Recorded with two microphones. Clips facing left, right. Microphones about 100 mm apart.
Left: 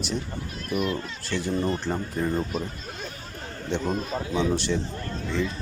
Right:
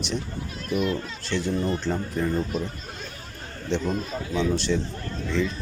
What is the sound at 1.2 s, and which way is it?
Speech, 60° right (ahead or behind).